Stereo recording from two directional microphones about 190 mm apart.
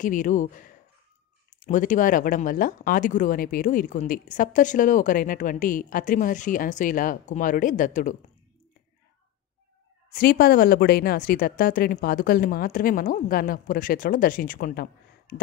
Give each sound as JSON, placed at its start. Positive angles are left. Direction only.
{"t": 0.0, "sound": "speech", "side_deg": 45}
{"t": 10.1, "sound": "speech", "side_deg": 55}